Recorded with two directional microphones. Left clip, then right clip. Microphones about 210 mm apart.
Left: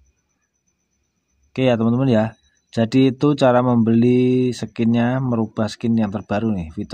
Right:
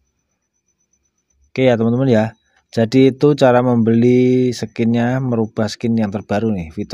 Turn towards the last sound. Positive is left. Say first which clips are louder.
# right 4 dB
turn(degrees=-20)  # may be behind; listen again after turning